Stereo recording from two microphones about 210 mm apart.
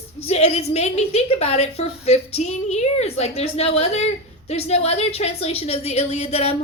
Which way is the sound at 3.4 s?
30° left (ahead or behind).